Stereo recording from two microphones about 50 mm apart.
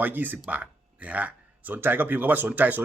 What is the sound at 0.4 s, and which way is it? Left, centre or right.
Speech, right.